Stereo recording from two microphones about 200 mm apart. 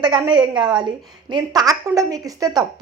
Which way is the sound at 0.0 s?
20° right (ahead or behind).